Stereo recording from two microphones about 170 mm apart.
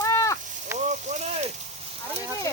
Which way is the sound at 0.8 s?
45° right (ahead or behind).